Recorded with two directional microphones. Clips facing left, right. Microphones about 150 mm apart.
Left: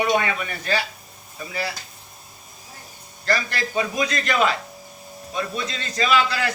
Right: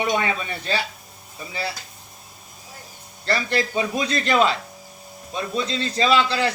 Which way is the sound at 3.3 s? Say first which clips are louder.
Right 2 dB; 30° right (ahead or behind).